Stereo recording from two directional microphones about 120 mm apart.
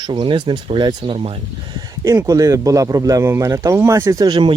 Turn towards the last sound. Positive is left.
turn(degrees=-35)  # may be behind; listen again after turning